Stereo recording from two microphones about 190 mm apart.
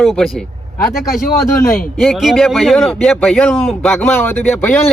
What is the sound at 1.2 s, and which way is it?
Speech, 50° left (ahead or behind).